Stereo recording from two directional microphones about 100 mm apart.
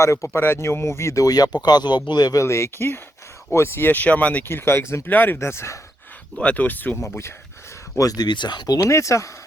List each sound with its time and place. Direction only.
0.0 s speech: 30° left (ahead or behind)
6.4 s speech: 15° left (ahead or behind)
7.9 s speech: 40° left (ahead or behind)